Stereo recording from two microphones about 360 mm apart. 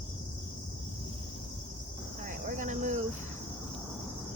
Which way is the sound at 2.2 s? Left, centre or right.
Right.